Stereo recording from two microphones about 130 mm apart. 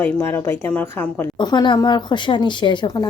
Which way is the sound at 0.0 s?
15° left (ahead or behind).